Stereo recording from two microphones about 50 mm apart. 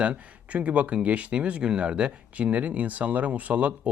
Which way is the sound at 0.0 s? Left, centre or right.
Right.